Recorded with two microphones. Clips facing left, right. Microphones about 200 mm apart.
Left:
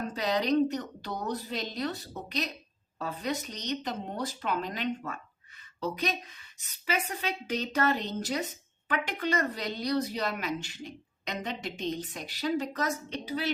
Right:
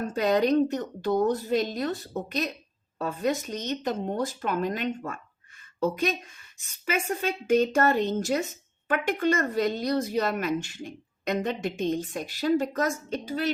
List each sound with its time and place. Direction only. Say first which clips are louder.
0.0 s speech: right 6 dB; 50° right (ahead or behind)